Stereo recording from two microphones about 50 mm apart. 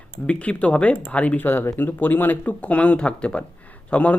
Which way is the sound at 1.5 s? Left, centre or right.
Left.